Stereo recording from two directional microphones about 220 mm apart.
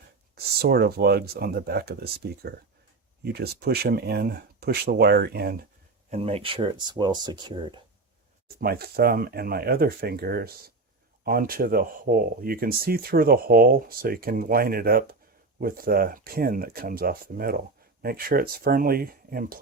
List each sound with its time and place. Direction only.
0.3 s speech: 45° right (ahead or behind)
6.1 s speech: 25° right (ahead or behind)
8.6 s speech: 45° right (ahead or behind)